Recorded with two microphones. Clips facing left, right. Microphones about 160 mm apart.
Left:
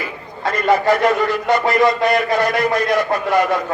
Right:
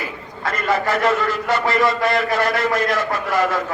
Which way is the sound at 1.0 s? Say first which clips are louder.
Left 3 dB; 20° left (ahead or behind).